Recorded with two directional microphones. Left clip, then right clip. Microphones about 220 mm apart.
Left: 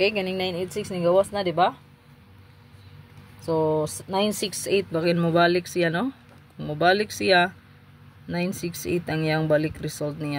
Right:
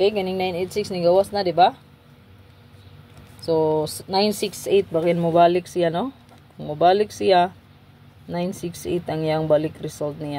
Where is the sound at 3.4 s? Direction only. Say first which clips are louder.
Right 3 dB; 30° left (ahead or behind).